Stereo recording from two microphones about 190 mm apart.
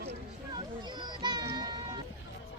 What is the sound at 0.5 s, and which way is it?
Children playing, 20° right (ahead or behind).